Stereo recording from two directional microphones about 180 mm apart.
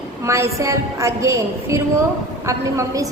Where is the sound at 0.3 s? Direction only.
15° right (ahead or behind).